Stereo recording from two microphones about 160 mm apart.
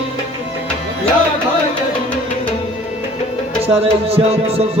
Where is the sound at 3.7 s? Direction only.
40° right (ahead or behind).